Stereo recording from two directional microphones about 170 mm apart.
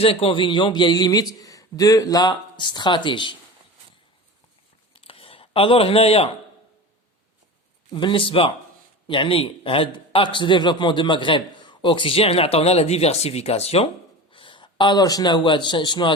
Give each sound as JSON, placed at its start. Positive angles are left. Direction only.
{"t": 0.0, "sound": "a man's voice", "side_deg": 35}
{"t": 4.9, "sound": "a sound", "side_deg": 35}
{"t": 7.9, "sound": "a man's voice", "side_deg": 30}